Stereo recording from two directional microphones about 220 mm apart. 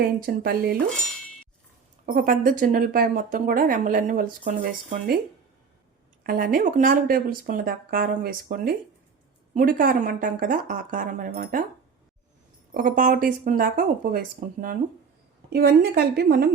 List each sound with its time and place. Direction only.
0.2 s a woman's voice: 40° right (ahead or behind)
2.1 s speech: 40° right (ahead or behind)
6.2 s speech: 40° right (ahead or behind)
12.7 s speech: 40° right (ahead or behind)
15.4 s a woman's voice: 45° right (ahead or behind)